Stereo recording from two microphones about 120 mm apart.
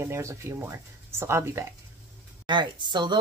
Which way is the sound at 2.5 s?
40° right (ahead or behind).